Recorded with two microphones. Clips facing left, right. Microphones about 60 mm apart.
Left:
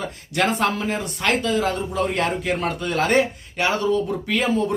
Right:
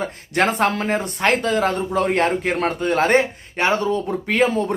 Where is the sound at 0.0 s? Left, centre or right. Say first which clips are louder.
Right 3 dB; right.